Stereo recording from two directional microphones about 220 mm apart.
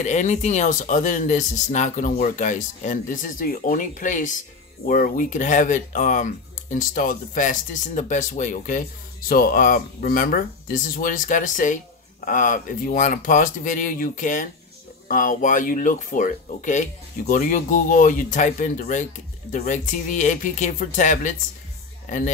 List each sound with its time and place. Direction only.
0.0 s speech: 30° left (ahead or behind)